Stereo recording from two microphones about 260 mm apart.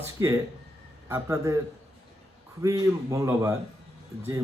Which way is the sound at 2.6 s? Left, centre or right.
Centre.